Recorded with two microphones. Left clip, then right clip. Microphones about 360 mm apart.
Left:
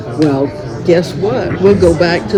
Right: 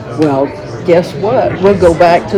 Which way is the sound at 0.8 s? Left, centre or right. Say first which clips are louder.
Right 2 dB; centre.